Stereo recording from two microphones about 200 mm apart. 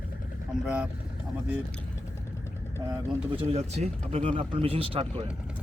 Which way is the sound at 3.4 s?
30° right (ahead or behind).